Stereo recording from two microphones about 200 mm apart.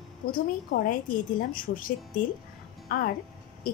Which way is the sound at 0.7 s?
40° left (ahead or behind).